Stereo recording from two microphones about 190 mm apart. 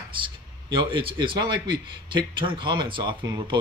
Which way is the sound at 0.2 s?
25° right (ahead or behind).